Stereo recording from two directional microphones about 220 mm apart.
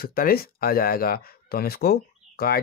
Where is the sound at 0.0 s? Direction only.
40° left (ahead or behind).